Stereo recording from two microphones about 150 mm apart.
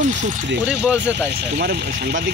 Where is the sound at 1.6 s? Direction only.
90° right.